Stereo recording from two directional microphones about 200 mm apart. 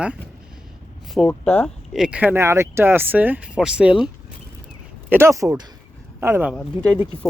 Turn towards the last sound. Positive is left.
turn(degrees=5)  # may be behind; listen again after turning